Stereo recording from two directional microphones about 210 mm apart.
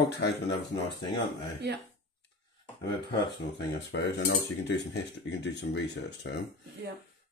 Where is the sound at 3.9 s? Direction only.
55° left (ahead or behind).